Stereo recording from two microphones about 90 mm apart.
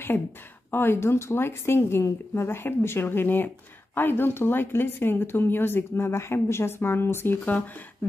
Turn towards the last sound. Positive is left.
turn(degrees=20)  # may be behind; listen again after turning